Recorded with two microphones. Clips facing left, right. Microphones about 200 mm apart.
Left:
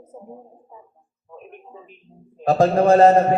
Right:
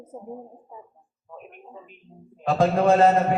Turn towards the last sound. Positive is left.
turn(degrees=40)  # may be behind; listen again after turning